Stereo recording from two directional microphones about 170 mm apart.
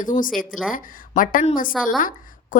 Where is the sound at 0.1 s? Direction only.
30° left (ahead or behind).